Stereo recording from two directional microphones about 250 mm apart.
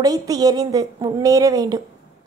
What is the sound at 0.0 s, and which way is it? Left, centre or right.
A woman's voice, centre.